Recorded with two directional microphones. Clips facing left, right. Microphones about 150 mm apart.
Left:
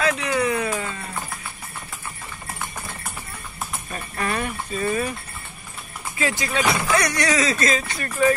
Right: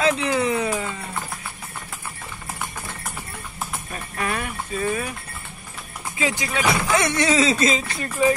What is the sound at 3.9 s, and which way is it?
Speech, 5° right (ahead or behind).